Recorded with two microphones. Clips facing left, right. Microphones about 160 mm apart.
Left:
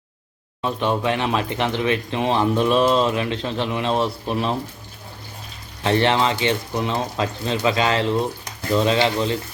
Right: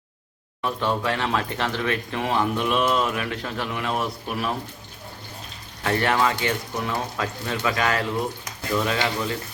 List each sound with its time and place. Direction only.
0.6 s speech: 20° left (ahead or behind)
5.8 s speech: 25° left (ahead or behind)